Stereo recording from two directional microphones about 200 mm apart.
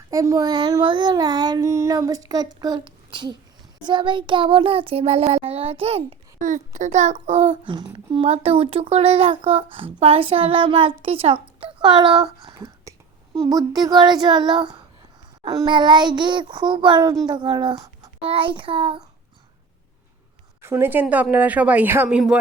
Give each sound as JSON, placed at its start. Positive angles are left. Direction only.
{"t": 0.1, "sound": "a child's voice", "side_deg": -15}
{"t": 20.6, "sound": "speech", "side_deg": -10}